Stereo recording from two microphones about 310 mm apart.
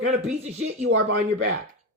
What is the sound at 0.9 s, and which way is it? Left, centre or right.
Speech, right.